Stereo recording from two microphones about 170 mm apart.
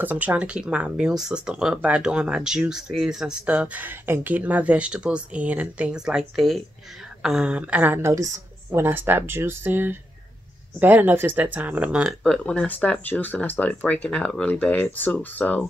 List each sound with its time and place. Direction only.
0.0 s speech: 10° right (ahead or behind); by 15.6 s 10° left (ahead or behind)